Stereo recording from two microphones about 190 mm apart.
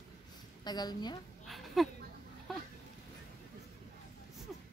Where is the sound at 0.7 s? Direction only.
20° left (ahead or behind).